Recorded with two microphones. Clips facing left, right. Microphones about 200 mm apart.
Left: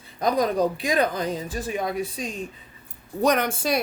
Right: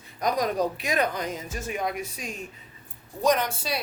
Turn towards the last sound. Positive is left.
turn(degrees=50)  # may be behind; listen again after turning